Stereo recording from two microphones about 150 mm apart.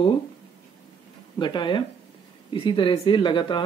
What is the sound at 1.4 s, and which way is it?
Speech, 30° left (ahead or behind).